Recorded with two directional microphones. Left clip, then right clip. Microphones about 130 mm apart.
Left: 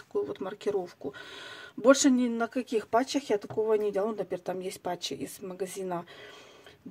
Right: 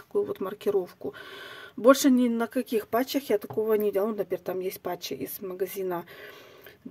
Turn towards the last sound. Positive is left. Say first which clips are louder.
# right 4 dB
turn(degrees=-30)  # may be behind; listen again after turning